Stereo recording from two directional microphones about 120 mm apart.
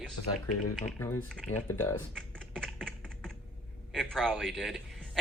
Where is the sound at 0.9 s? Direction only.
20° left (ahead or behind).